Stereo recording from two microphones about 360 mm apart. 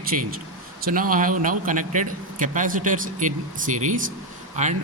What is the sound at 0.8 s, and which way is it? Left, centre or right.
A man's voice, right.